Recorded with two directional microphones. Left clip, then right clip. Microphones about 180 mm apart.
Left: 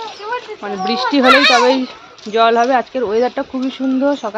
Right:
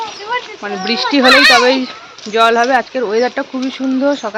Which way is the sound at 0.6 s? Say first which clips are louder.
Left 1 dB; centre (ahead or behind).